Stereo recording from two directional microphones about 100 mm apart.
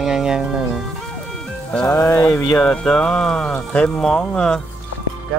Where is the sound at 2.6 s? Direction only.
10° left (ahead or behind).